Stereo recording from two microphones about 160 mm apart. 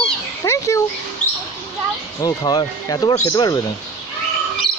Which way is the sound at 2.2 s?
25° left (ahead or behind).